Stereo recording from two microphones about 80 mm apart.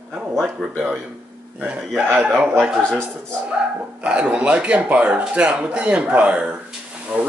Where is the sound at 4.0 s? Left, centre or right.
Centre.